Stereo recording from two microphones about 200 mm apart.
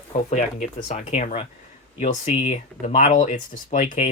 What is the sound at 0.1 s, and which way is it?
Speech, 35° left (ahead or behind).